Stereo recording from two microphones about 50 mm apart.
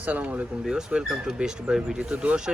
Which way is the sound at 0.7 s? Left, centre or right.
Centre.